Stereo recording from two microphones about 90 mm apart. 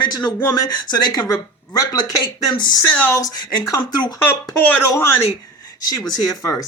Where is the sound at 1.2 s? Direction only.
35° left (ahead or behind).